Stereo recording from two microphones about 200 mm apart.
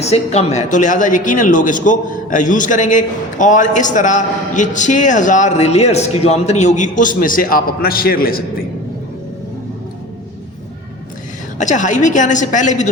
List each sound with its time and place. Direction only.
0.0 s a man's voice: 35° left (ahead or behind)
11.5 s a man's voice: 40° left (ahead or behind)